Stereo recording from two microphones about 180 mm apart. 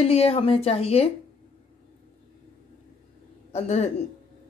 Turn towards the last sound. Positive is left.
turn(degrees=35)  # may be behind; listen again after turning